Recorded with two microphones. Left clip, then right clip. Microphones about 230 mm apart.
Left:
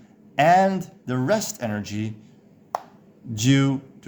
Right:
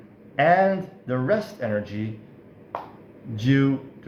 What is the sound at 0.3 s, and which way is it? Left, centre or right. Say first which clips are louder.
Speech: left 1 dB; left.